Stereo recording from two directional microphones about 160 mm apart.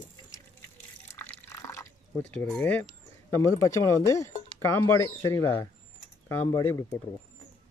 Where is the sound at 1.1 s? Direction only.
15° left (ahead or behind).